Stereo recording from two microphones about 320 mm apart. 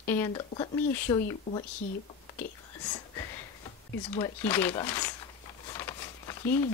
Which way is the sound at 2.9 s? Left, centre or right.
Centre.